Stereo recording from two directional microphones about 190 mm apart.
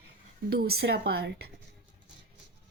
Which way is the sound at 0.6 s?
60° right (ahead or behind).